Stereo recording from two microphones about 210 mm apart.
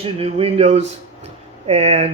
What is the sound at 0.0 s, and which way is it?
Speech, 30° right (ahead or behind).